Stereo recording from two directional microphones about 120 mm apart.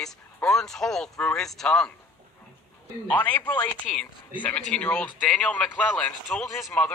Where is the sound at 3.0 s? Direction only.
10° left (ahead or behind).